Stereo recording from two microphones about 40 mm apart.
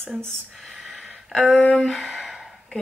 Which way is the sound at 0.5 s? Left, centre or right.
Centre.